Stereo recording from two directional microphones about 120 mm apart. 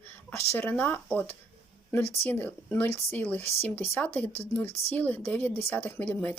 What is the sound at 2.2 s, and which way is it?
A woman's voice, 15° left (ahead or behind).